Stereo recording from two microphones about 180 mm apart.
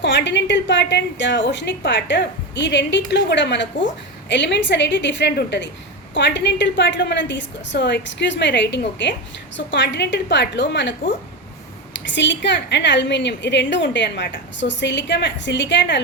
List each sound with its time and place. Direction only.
0.0 s a woman's voice: 75° left (ahead or behind)